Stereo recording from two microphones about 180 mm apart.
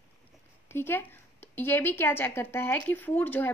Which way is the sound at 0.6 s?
15° left (ahead or behind).